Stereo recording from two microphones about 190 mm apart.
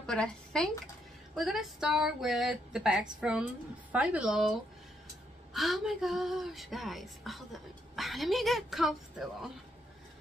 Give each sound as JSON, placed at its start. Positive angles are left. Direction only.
{"t": 0.0, "sound": "a woman's voice", "side_deg": 5}